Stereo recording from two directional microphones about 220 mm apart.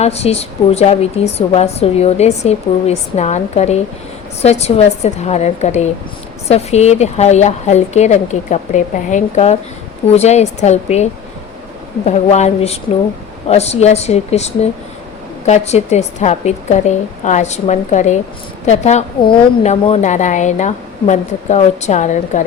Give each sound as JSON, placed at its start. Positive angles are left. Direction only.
{"t": 0.0, "sound": "a woman's voice", "side_deg": 30}